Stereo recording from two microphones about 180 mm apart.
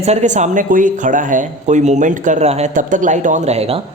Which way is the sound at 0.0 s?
40° right (ahead or behind).